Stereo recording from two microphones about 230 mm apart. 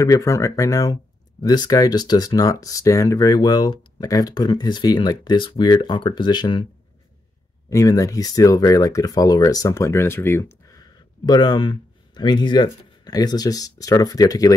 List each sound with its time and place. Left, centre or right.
0.0 s speech: centre
7.7 s speech: centre